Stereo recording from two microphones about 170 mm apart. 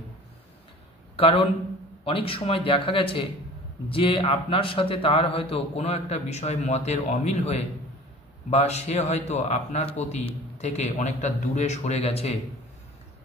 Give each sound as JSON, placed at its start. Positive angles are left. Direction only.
{"t": 1.1, "sound": "a man's voice", "side_deg": 35}